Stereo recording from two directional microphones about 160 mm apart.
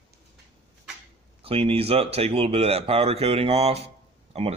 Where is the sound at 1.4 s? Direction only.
35° right (ahead or behind).